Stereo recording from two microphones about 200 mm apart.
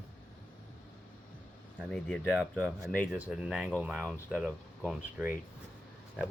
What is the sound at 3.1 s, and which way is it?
Speech, 5° right (ahead or behind).